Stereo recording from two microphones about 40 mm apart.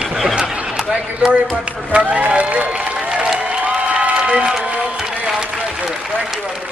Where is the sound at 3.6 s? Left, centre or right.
Right.